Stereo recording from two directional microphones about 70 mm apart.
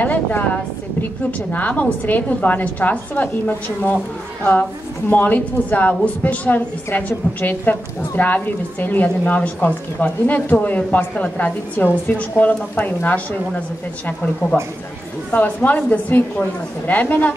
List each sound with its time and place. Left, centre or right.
0.0 s a woman's voice: left
1.5 s a woman's voice: left
5.1 s a woman's voice: left